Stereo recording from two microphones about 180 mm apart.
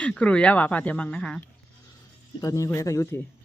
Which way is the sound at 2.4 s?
20° left (ahead or behind).